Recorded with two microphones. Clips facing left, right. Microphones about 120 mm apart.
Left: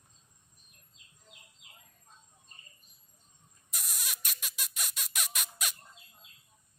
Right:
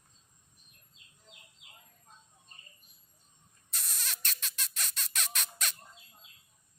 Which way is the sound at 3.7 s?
10° left (ahead or behind).